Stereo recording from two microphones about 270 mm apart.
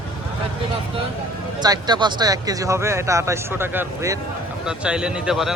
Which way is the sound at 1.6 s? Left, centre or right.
Centre.